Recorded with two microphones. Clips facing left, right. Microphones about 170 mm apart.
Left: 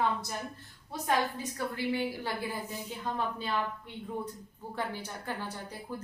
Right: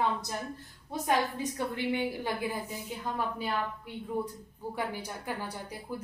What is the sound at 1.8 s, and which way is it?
A woman's voice, 20° right (ahead or behind).